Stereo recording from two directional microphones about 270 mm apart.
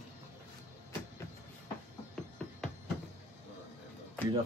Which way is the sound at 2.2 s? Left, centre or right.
Centre.